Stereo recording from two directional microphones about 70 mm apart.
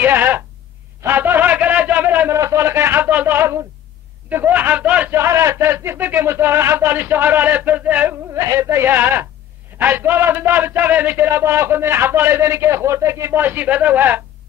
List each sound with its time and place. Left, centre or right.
0.0 s a sound: right
2.3 s a sound: right
4.3 s speech: right
5.1 s speech: right
7.0 s speech: right
8.4 s speech: right
13.4 s speech: right